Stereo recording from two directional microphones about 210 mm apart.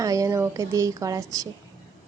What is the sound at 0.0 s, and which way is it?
A woman's voice, 15° right (ahead or behind).